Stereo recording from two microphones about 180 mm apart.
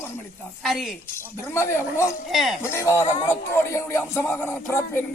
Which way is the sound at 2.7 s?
15° left (ahead or behind).